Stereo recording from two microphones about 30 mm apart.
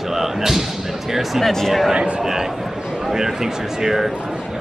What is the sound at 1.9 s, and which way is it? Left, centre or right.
Speech, right.